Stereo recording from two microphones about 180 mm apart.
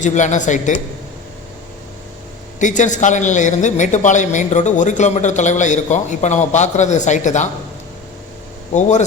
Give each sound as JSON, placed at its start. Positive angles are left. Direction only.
{"t": 0.0, "sound": "a woman's voice", "side_deg": 40}
{"t": 2.6, "sound": "a man's voice", "side_deg": 45}
{"t": 8.7, "sound": "a woman's voice", "side_deg": 40}